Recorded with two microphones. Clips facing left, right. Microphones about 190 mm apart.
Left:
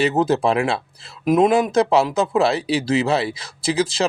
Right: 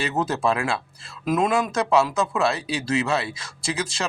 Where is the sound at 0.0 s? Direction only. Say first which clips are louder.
Left 6 dB; 30° left (ahead or behind).